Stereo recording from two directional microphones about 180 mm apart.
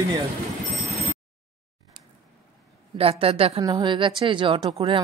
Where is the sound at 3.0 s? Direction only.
30° right (ahead or behind).